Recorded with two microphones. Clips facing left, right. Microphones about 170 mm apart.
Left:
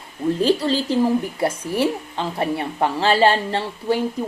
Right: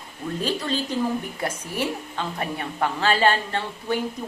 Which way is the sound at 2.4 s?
30° left (ahead or behind).